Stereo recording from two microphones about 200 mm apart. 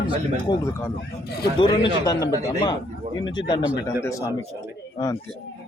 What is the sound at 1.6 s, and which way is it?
A man's voice, 20° left (ahead or behind).